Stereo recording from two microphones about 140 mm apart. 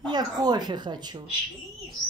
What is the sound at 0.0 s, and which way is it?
Speech, 30° right (ahead or behind).